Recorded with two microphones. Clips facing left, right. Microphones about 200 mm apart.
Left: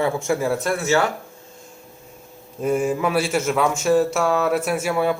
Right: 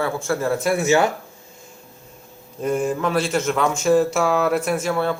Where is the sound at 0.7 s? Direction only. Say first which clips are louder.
Right 4 dB; 15° right (ahead or behind).